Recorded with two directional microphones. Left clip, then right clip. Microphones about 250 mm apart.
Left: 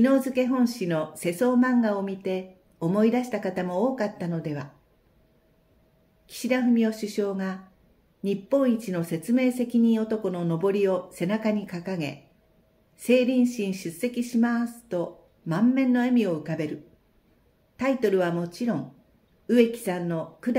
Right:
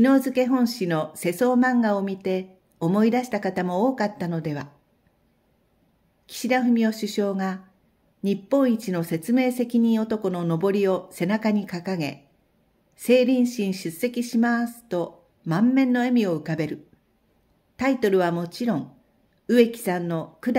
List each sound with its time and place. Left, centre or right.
0.0 s speech: right
6.2 s speech: right
17.7 s speech: right